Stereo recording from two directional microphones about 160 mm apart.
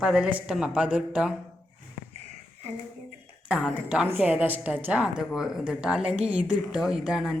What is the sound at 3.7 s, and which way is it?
A woman's voice, 10° right (ahead or behind).